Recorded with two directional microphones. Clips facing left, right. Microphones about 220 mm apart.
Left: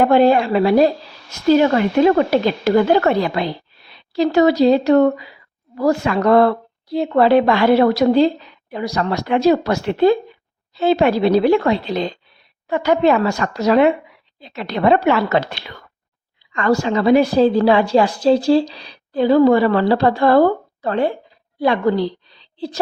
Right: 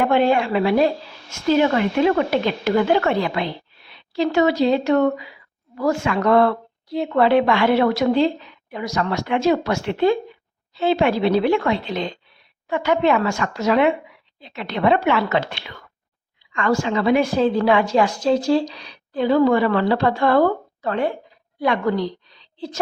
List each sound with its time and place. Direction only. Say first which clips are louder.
0.0 s a woman's voice: left 5 dB; 40° left (ahead or behind)